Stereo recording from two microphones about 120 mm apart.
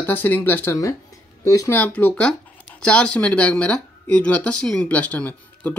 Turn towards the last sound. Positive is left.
turn(degrees=10)  # may be behind; listen again after turning